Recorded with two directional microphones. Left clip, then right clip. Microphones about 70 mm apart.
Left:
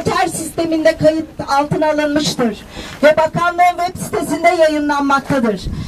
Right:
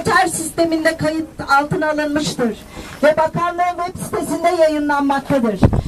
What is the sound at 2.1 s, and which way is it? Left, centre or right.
Speech, left.